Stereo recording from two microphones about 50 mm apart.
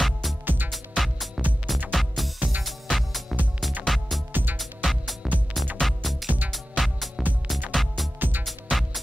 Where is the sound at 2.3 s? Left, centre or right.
Right.